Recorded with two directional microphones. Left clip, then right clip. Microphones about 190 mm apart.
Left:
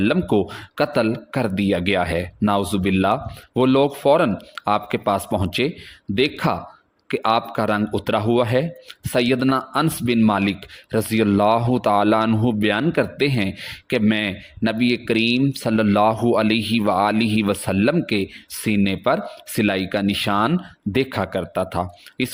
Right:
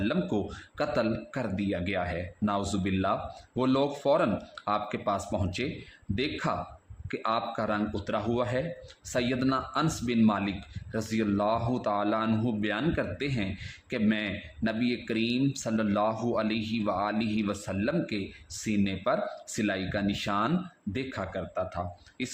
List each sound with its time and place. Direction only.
0.0 s speech: 50° left (ahead or behind)